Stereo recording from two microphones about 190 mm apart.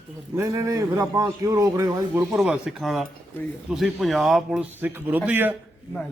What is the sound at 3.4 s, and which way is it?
Speech, 10° left (ahead or behind).